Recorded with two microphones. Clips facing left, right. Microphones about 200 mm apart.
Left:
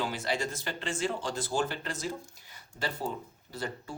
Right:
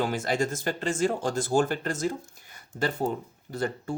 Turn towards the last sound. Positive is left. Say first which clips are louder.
# right 8 dB
turn(degrees=-50)  # may be behind; listen again after turning